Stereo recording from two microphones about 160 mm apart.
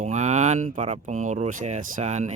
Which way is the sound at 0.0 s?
45° right (ahead or behind).